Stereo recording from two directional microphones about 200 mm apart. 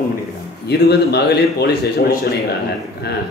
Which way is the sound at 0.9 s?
55° left (ahead or behind).